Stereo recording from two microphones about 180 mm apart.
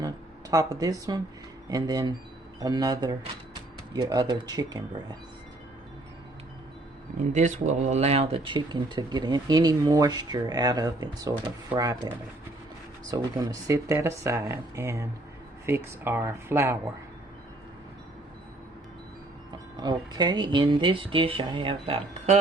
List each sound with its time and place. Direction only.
0.5 s speech: 20° right (ahead or behind)
7.3 s speech: 40° right (ahead or behind); by 16.7 s 15° right (ahead or behind)
19.8 s speech: 25° right (ahead or behind)